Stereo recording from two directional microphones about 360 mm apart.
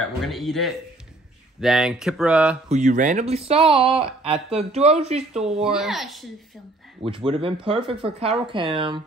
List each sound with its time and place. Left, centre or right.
0.2 s speech: centre
2.7 s speech: right
5.6 s speech: centre
7.0 s speech: centre